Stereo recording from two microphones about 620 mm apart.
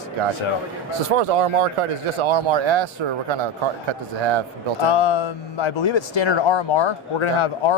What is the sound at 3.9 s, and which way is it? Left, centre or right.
Speech, right.